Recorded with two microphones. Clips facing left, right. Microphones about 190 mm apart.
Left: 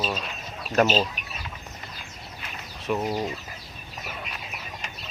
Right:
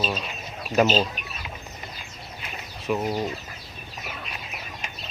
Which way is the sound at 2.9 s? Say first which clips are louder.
Right 1 dB; 5° right (ahead or behind).